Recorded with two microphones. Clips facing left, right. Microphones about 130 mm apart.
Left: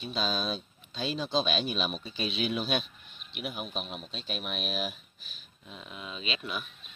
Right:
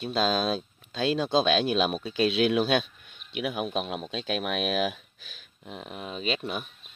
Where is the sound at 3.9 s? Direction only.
90° right.